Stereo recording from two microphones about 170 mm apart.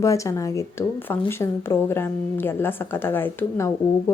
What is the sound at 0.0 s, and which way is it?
Speech, 20° left (ahead or behind).